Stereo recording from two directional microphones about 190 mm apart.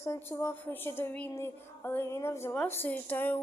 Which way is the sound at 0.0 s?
15° left (ahead or behind).